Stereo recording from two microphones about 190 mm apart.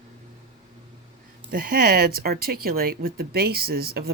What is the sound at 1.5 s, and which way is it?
Speech, 50° right (ahead or behind).